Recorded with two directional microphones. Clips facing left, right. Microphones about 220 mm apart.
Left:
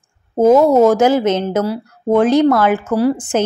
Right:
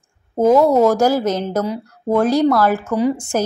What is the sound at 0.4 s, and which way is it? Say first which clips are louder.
A woman's voice: left 3 dB; 20° left (ahead or behind).